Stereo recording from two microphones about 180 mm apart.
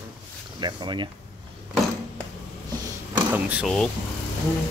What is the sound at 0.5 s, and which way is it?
Speech, 25° right (ahead or behind).